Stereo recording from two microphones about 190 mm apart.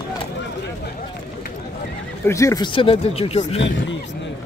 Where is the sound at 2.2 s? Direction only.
15° left (ahead or behind); by 3.6 s 30° left (ahead or behind).